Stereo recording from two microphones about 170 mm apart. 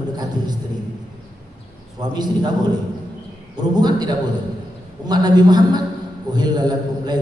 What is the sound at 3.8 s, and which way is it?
A man's voice, 25° right (ahead or behind).